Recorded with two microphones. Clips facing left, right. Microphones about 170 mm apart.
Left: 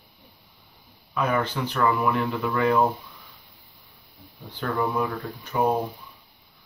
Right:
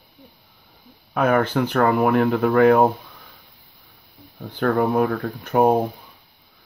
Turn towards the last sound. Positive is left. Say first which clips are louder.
# right 6 dB
turn(degrees=-50)  # may be behind; listen again after turning